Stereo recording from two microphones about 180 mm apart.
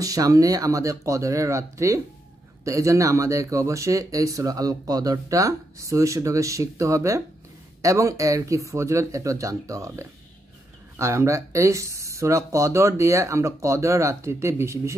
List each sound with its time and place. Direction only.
0.0 s speech: 20° right (ahead or behind)